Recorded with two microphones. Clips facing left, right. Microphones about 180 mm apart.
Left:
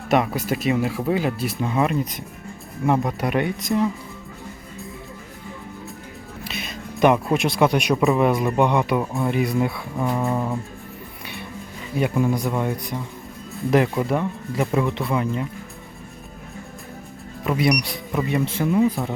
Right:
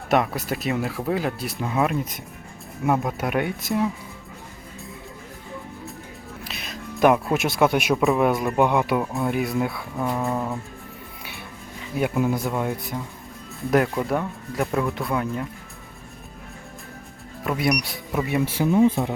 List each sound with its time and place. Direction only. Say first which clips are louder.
0.1 s speech: left 2 dB; centre (ahead or behind)
6.4 s speech: left 4 dB; centre (ahead or behind)
11.2 s music: left 4 dB; centre (ahead or behind)
11.9 s speech: left 1 dB; 5° right (ahead or behind)
17.4 s speech: left 3 dB; centre (ahead or behind)
18.7 s speech: right 2 dB; 25° right (ahead or behind)